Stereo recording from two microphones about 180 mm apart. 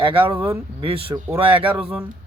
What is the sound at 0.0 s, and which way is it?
Speech, 30° right (ahead or behind).